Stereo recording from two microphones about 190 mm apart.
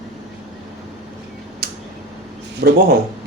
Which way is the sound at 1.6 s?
55° right (ahead or behind).